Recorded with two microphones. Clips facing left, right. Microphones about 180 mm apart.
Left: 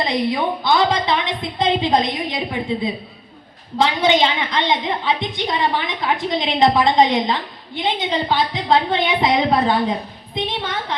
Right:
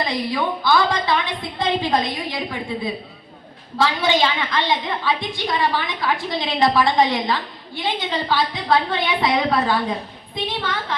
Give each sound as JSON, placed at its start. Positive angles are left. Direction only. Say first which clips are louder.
{"t": 0.0, "sound": "a woman's voice", "louder": "left 3 dB", "side_deg": 20}